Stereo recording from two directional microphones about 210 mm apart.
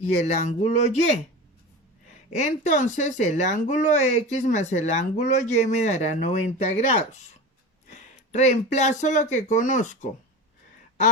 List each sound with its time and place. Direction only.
0.1 s speech: 30° left (ahead or behind)
2.3 s speech: 35° left (ahead or behind)